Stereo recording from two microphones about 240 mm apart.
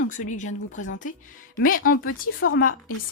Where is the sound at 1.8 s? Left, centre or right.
Left.